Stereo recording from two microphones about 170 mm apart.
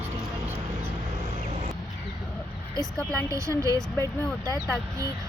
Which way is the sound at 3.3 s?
20° right (ahead or behind).